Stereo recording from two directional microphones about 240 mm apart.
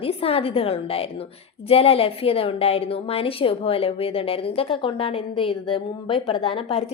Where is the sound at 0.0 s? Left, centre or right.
Left.